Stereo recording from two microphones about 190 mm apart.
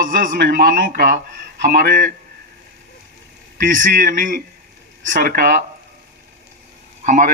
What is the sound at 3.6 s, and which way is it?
A man's voice, 45° right (ahead or behind).